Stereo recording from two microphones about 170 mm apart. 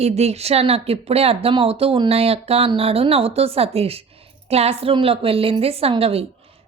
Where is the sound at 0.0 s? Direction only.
40° right (ahead or behind).